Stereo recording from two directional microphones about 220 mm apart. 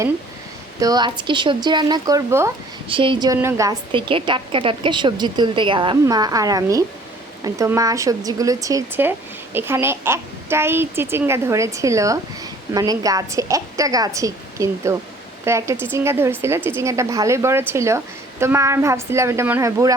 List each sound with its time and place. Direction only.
0.8 s a woman's voice: 15° right (ahead or behind)